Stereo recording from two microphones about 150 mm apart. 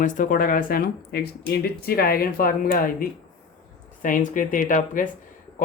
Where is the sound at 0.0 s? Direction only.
65° left (ahead or behind).